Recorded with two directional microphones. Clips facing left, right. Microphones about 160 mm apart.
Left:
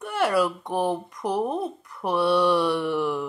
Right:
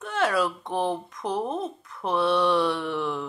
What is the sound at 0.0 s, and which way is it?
Speech, 10° left (ahead or behind).